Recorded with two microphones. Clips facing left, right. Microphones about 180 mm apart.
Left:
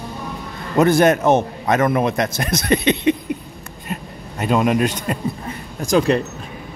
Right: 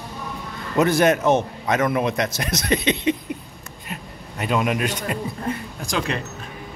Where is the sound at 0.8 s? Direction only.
50° left (ahead or behind).